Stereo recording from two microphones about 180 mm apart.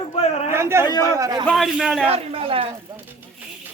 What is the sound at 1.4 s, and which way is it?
Speech, centre (ahead or behind).